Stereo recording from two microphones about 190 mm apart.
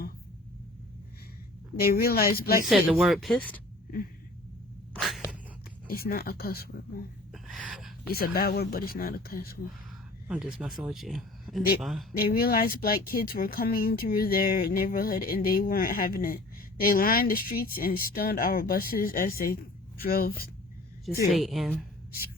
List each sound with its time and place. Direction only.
1.8 s speech: 50° left (ahead or behind)
2.6 s speech: centre (ahead or behind)
4.9 s a sound: centre (ahead or behind)
5.9 s speech: 50° left (ahead or behind)
7.3 s gasp: centre (ahead or behind)
8.1 s speech: 55° left (ahead or behind)
10.2 s speech: 5° right (ahead or behind)
12.1 s speech: 50° left (ahead or behind)
21.2 s speech: centre (ahead or behind)